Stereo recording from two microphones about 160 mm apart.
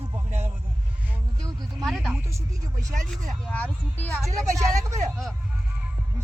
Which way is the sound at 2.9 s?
55° right (ahead or behind).